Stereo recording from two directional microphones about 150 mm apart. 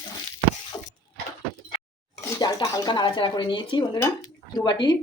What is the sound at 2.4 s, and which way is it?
Speech, 25° left (ahead or behind).